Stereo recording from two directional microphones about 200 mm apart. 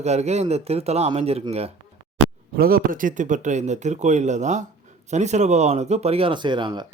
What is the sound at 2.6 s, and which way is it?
Speech, 45° right (ahead or behind).